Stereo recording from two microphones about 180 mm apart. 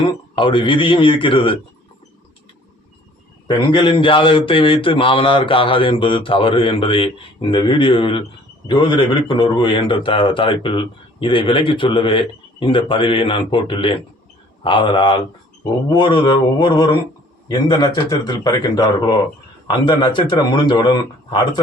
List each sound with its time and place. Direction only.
0.0 s a man's voice: 30° left (ahead or behind)
3.4 s a man's voice: 25° left (ahead or behind)